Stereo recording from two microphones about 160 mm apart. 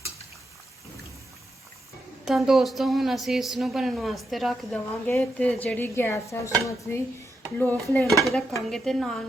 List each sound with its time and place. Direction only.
2.2 s a woman's voice: 5° right (ahead or behind)